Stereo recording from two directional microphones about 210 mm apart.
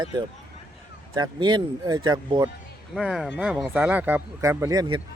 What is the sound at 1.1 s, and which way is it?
Speech, 20° right (ahead or behind).